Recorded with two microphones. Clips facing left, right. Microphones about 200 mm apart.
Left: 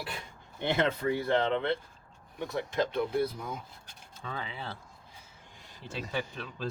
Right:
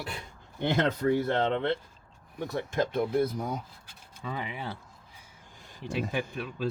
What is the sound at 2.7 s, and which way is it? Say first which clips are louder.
Speech: right 3 dB; 45° right (ahead or behind).